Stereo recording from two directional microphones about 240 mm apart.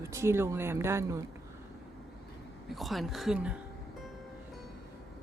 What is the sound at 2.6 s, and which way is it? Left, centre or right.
Speech, centre.